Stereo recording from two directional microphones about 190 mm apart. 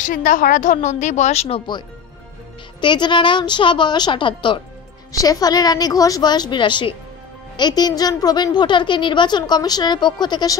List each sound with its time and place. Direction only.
0.0 s a woman's voice: 45° left (ahead or behind)
2.8 s a woman's voice: 25° left (ahead or behind)